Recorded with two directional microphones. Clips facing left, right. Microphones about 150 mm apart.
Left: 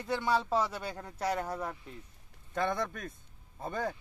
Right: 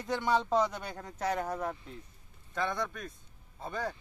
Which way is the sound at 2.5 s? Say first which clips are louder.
Left 2 dB; 55° left (ahead or behind).